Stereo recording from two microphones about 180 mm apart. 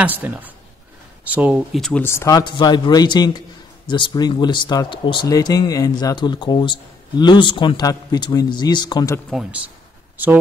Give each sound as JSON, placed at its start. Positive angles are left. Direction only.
{"t": 0.0, "sound": "speech", "side_deg": -10}
{"t": 2.0, "sound": "speech", "side_deg": 15}
{"t": 9.3, "sound": "speech", "side_deg": -5}